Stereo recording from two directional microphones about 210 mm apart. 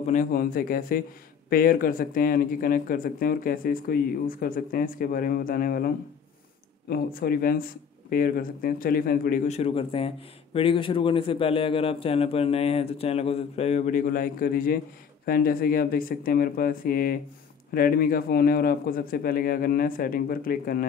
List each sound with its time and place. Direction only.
0.0 s speech: 35° left (ahead or behind)